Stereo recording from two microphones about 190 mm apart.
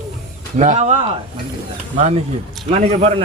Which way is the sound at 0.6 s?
40° right (ahead or behind).